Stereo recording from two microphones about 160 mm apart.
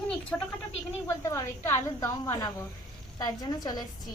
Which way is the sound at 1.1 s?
20° left (ahead or behind).